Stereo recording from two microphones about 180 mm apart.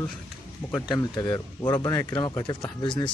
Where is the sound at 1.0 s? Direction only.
20° left (ahead or behind).